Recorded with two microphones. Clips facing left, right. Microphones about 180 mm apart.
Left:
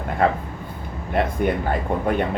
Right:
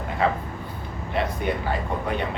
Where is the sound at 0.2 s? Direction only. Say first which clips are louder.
Left 3 dB; 50° left (ahead or behind).